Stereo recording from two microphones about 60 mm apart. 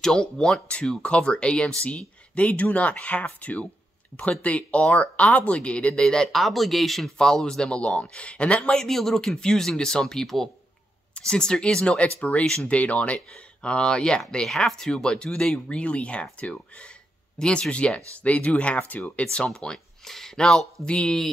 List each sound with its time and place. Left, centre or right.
0.0 s speech: centre
7.2 s speech: centre
8.7 s speech: centre
19.5 s speech: centre